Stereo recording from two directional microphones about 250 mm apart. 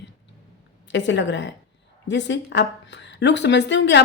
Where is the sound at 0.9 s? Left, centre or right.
Left.